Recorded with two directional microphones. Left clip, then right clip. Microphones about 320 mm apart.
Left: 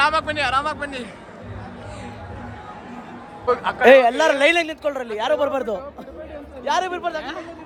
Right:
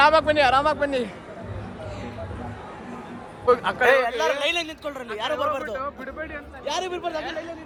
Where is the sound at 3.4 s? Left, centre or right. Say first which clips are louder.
Right 1 dB; centre.